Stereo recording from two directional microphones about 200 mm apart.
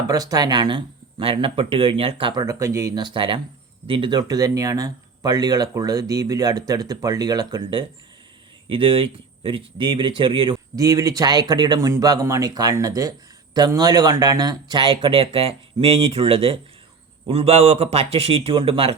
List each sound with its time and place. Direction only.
0.1 s speech: 20° right (ahead or behind)